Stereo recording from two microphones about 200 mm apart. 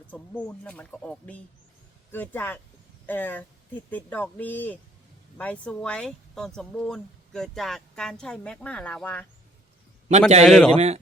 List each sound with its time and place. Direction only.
0.1 s speech: 5° left (ahead or behind)
10.1 s a man's voice: 35° right (ahead or behind)
10.4 s speech: 5° left (ahead or behind)
10.8 s a man's voice: 35° right (ahead or behind)